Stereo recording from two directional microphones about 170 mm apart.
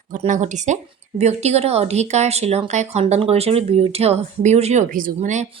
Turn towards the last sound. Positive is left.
turn(degrees=-45)  # may be behind; listen again after turning